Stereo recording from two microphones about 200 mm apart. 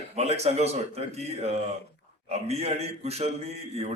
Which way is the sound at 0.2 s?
30° right (ahead or behind).